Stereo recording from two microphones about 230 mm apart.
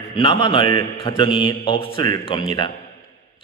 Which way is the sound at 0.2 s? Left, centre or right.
Left.